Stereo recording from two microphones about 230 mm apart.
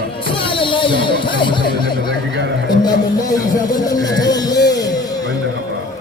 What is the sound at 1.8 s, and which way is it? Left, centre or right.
Speech, right.